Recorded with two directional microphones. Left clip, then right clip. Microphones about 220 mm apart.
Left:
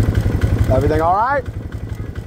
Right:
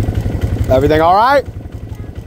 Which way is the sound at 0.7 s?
30° right (ahead or behind).